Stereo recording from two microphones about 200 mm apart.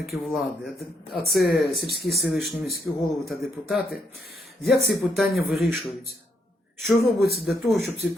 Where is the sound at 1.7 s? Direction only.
50° left (ahead or behind).